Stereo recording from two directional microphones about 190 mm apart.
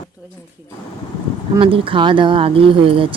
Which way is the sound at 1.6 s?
30° right (ahead or behind).